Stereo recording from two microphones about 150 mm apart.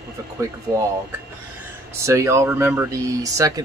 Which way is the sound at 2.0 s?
20° right (ahead or behind).